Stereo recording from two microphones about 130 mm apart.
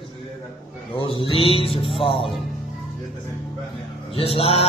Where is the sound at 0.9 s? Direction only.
40° left (ahead or behind).